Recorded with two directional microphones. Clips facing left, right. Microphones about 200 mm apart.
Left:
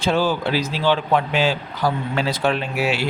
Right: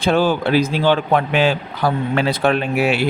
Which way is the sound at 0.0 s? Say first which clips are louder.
Right 3 dB; 55° right (ahead or behind).